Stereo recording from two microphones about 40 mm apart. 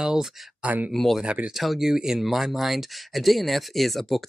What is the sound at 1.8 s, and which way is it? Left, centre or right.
Speech, centre.